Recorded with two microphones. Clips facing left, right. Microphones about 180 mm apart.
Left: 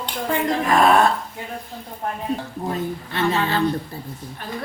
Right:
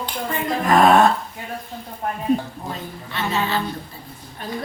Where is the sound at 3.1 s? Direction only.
50° left (ahead or behind).